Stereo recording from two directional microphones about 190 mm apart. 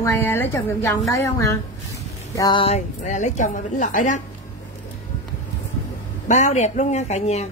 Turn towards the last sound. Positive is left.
turn(degrees=35)  # may be behind; listen again after turning